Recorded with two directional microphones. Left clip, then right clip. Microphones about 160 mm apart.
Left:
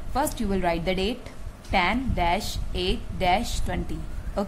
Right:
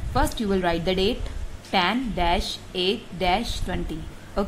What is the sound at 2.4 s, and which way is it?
Speech, 35° left (ahead or behind).